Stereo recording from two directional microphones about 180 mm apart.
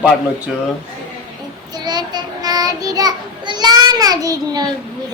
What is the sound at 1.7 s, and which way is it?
Child singing, 25° right (ahead or behind).